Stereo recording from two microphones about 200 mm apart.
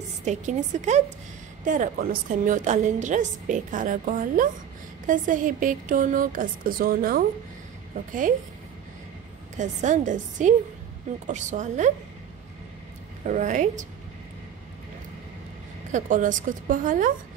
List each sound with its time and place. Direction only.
0.2 s a woman's voice: 35° right (ahead or behind)
9.6 s a woman's voice: 40° right (ahead or behind)
13.2 s a woman's voice: 40° right (ahead or behind)
15.9 s a woman's voice: 40° right (ahead or behind)